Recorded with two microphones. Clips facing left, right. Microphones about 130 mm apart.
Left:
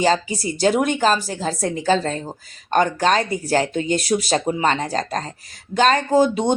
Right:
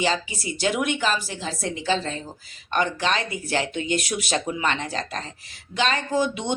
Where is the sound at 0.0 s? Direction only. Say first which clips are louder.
Left 6 dB; 40° left (ahead or behind).